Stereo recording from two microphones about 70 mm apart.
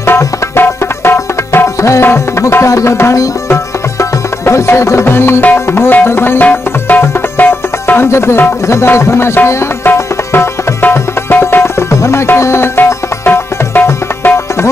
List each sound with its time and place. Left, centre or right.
0.6 s music: left
1.8 s music: left
14.2 s tabla: left